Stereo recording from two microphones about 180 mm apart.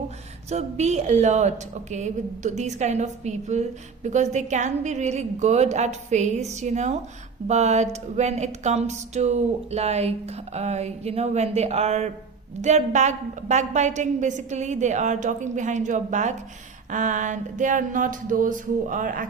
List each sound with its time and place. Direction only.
0.5 s a woman's voice: 40° right (ahead or behind)
16.9 s music: 45° right (ahead or behind)